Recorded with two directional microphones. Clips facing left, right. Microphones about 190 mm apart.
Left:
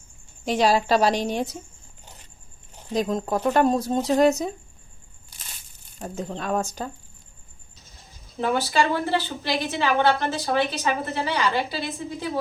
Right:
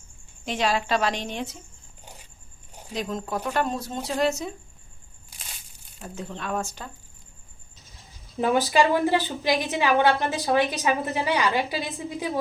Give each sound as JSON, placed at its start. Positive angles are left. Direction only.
{"t": 0.4, "sound": "speech", "side_deg": 35}
{"t": 2.9, "sound": "speech", "side_deg": 40}
{"t": 6.0, "sound": "speech", "side_deg": 40}
{"t": 8.4, "sound": "a woman's voice", "side_deg": -15}